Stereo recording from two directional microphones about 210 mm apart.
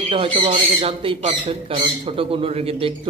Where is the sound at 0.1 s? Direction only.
25° right (ahead or behind).